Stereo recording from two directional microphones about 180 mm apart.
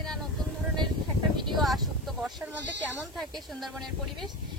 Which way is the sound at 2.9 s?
Centre (ahead or behind).